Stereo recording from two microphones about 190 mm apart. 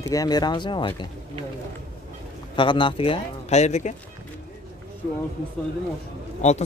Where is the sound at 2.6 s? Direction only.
25° left (ahead or behind).